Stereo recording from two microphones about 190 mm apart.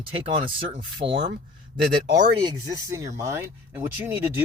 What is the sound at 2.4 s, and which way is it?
Speech, 20° right (ahead or behind).